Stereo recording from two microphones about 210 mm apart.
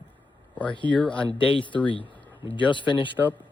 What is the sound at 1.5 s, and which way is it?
Speech, 25° left (ahead or behind).